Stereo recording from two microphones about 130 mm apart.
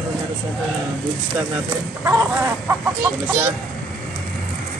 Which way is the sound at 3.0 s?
30° right (ahead or behind).